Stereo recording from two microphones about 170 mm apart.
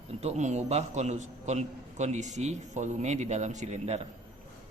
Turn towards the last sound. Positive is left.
turn(degrees=-40)  # may be behind; listen again after turning